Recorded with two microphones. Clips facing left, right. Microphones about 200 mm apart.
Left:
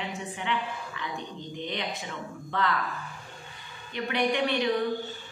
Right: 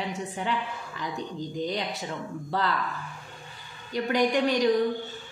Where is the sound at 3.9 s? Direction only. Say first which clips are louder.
Right 3 dB; 40° right (ahead or behind).